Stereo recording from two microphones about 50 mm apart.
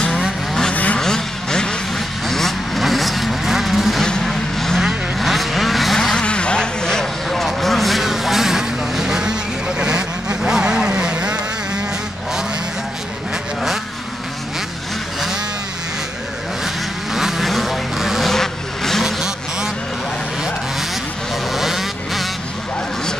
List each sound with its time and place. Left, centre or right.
0.9 s vehicle: centre
6.1 s vehicle: left; by 11.8 s centre
16.6 s vehicle: centre
18.3 s vehicle: centre
19.0 s vehicle: centre
21.5 s vehicle: centre